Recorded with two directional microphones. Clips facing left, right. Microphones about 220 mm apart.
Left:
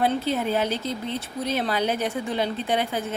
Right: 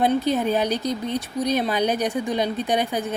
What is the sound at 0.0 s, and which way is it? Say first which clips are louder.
Speech: right 3 dB; 15° right (ahead or behind).